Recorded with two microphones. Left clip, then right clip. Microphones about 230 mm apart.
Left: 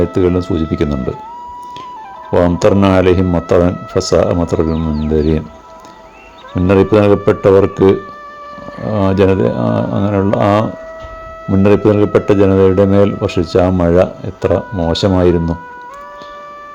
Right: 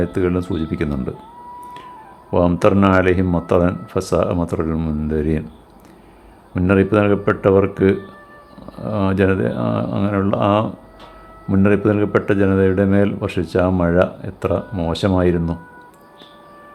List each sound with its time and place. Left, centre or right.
0.0 s speech: centre
2.3 s speech: centre
6.6 s speech: centre